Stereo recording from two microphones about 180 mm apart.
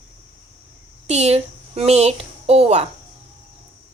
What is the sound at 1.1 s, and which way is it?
A woman's voice, 35° right (ahead or behind).